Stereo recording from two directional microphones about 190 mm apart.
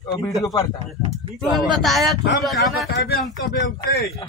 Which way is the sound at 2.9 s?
55° left (ahead or behind).